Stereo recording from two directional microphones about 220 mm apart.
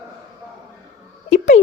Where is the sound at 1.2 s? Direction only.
30° left (ahead or behind).